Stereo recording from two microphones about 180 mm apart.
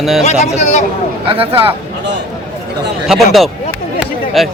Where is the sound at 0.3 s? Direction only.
40° left (ahead or behind).